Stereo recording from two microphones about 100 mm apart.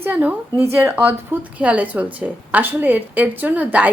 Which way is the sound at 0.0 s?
20° right (ahead or behind).